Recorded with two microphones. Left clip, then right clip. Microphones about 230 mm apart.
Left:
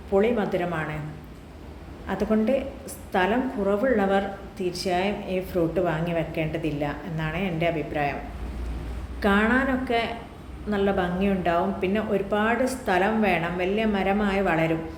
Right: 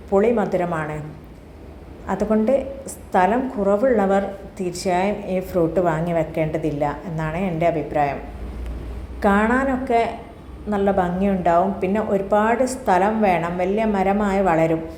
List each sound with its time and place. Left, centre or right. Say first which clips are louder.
0.1 s a woman's voice: right 5 dB; centre
2.0 s a woman's voice: right 5 dB; centre
9.2 s a woman's voice: right 4 dB; centre